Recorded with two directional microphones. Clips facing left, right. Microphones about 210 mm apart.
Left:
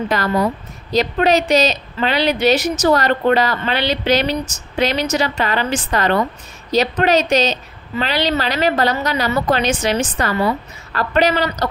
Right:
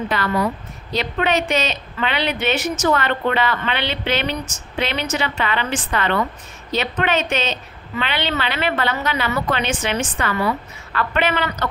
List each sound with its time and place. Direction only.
0.1 s a woman's voice: 40° left (ahead or behind)